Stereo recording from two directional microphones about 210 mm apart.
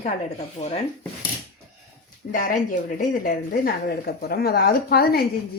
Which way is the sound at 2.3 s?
40° left (ahead or behind).